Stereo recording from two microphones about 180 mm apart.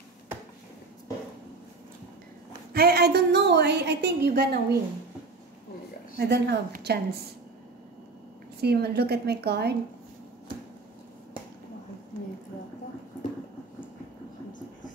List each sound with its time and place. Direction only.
2.7 s a woman's voice: 60° right (ahead or behind)
6.1 s a woman's voice: 65° right (ahead or behind)
8.5 s a woman's voice: 65° right (ahead or behind)